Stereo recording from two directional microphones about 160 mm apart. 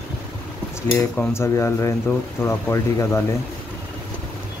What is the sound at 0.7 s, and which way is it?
Speech, 10° left (ahead or behind).